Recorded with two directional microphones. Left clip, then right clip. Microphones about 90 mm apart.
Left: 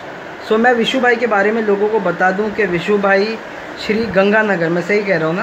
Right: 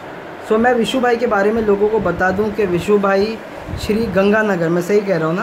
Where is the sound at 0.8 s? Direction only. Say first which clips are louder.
Left 2 dB; 15° right (ahead or behind).